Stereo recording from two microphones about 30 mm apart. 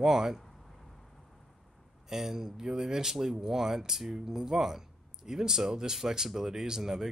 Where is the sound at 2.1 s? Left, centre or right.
Centre.